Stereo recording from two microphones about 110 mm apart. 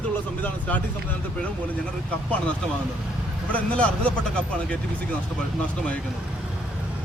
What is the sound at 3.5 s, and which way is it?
Speech, 10° left (ahead or behind).